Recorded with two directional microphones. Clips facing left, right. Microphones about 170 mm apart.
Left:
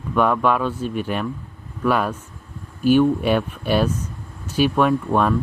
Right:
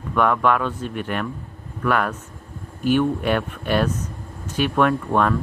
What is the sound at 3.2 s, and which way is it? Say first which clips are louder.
Speech: left 2 dB; 15° left (ahead or behind).